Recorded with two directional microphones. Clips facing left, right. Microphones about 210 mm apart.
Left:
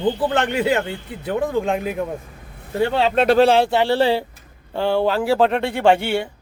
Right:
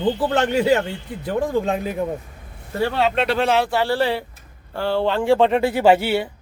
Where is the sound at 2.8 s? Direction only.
25° left (ahead or behind).